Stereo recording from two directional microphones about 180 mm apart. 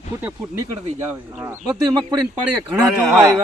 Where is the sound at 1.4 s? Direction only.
5° right (ahead or behind).